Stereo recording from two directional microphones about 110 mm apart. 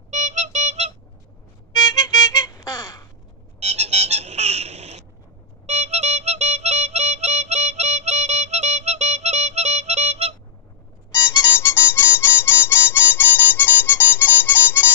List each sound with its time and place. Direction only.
0.1 s music: 90° right
1.7 s music: 35° left (ahead or behind)
3.5 s vehicle: 85° right
5.7 s music: 90° right
11.1 s harmonica: 30° left (ahead or behind)